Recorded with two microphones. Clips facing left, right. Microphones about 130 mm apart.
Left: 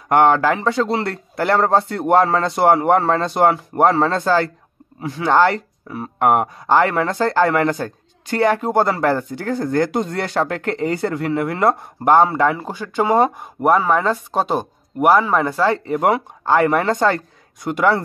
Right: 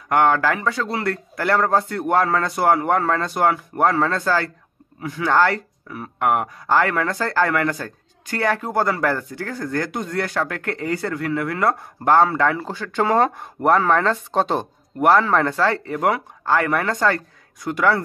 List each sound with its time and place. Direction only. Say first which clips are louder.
0.1 s speech: left 3 dB; 25° left (ahead or behind)